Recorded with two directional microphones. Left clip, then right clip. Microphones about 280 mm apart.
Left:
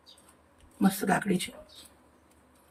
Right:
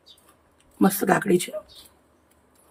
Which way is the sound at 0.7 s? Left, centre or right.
Centre.